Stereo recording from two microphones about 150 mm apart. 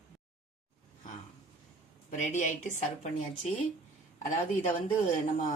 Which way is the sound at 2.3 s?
55° left (ahead or behind).